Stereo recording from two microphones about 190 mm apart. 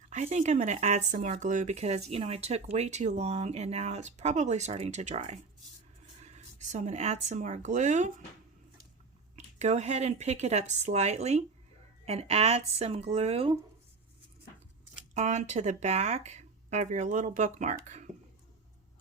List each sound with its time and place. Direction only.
0.1 s speech: 40° right (ahead or behind)
9.3 s speech: 35° right (ahead or behind)
15.1 s speech: 40° right (ahead or behind)